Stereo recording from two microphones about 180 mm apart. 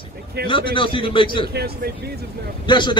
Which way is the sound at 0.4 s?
65° right (ahead or behind).